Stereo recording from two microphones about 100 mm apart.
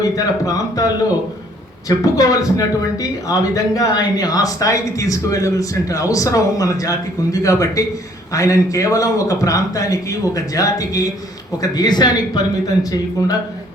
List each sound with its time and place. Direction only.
0.0 s speech: 35° left (ahead or behind)
1.9 s speech: 35° left (ahead or behind)